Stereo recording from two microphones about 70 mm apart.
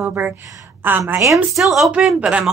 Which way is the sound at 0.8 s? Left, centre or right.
Right.